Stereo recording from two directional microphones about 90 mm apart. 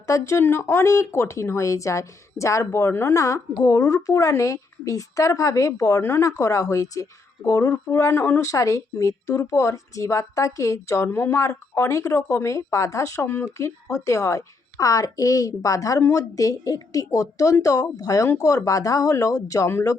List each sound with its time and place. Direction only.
0.1 s speech: 30° left (ahead or behind)